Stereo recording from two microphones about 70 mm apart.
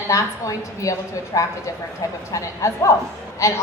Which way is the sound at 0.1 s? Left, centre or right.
Left.